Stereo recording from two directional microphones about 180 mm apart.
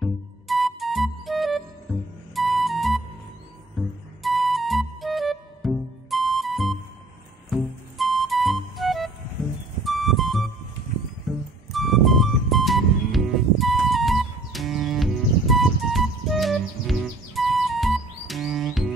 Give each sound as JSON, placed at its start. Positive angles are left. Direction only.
{"t": 0.0, "sound": "music", "side_deg": 0}